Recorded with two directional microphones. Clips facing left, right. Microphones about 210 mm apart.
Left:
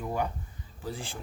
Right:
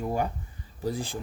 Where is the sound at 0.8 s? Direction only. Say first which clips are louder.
Right 7 dB; 40° right (ahead or behind).